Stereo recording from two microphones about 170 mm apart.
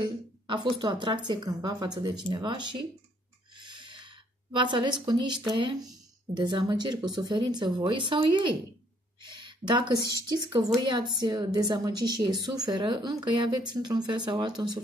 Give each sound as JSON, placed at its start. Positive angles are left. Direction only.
{"t": 0.0, "sound": "a woman's voice", "side_deg": -30}
{"t": 3.5, "sound": "a sound", "side_deg": -30}
{"t": 5.6, "sound": "a woman's voice", "side_deg": -30}